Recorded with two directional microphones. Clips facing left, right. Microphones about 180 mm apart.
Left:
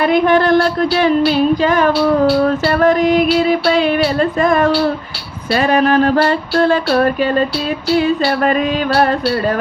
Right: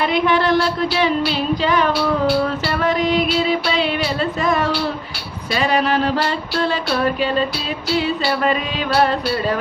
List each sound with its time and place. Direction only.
0.0 s music: 50° left (ahead or behind)